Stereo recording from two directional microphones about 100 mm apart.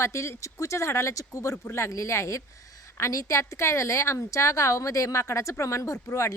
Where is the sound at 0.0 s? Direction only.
30° left (ahead or behind).